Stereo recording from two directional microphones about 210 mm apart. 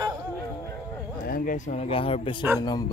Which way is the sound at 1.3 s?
40° left (ahead or behind).